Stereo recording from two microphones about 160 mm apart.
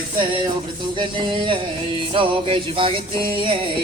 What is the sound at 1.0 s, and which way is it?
Music, 30° right (ahead or behind).